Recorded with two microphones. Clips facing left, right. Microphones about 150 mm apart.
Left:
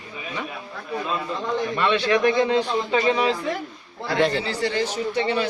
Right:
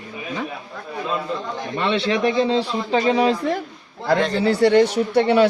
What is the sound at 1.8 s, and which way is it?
Speech, 30° right (ahead or behind).